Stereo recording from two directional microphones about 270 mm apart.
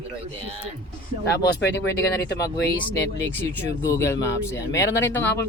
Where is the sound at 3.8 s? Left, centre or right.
Centre.